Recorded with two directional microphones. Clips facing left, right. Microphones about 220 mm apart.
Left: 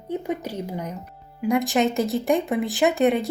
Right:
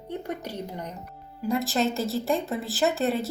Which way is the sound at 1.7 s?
15° left (ahead or behind).